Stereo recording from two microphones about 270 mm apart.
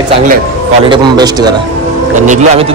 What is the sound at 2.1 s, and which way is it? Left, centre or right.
Speech, right.